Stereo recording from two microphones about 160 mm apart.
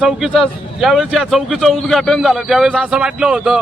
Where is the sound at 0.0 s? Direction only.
Centre (ahead or behind).